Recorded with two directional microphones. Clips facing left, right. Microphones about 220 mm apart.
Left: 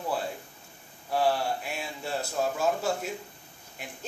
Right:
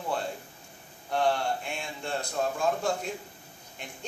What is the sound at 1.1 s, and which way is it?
A man's voice, 5° left (ahead or behind).